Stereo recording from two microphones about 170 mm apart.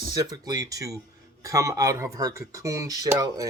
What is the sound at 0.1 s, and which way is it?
Speech, 20° right (ahead or behind).